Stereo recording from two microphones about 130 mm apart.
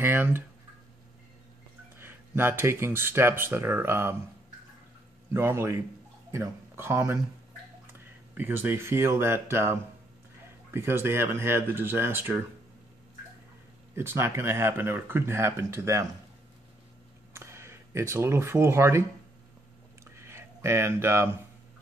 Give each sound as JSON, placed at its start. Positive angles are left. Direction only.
{"t": 0.0, "sound": "speech", "side_deg": -15}
{"t": 2.0, "sound": "speech", "side_deg": -15}
{"t": 5.3, "sound": "speech", "side_deg": -20}
{"t": 8.4, "sound": "speech", "side_deg": -15}
{"t": 13.9, "sound": "speech", "side_deg": -20}
{"t": 17.3, "sound": "speech", "side_deg": -20}
{"t": 20.2, "sound": "a sound", "side_deg": -20}